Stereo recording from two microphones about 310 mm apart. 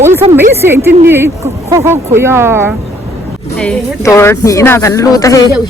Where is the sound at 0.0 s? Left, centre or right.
Centre.